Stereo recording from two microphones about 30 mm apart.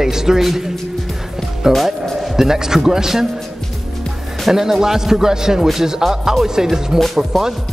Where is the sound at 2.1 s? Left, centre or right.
Centre.